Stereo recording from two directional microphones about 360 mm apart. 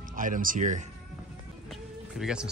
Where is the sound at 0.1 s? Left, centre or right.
Right.